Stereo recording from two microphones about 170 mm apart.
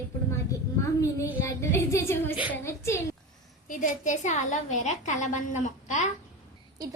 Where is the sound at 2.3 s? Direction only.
5° right (ahead or behind).